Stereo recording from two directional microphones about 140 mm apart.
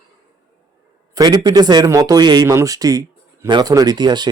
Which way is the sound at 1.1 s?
30° right (ahead or behind).